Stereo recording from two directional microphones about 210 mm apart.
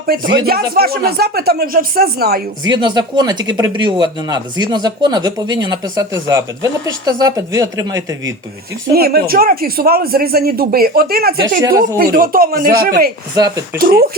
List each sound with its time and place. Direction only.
0.1 s speech: 45° right (ahead or behind)
2.6 s speech: 20° right (ahead or behind)
8.9 s speech: 45° right (ahead or behind)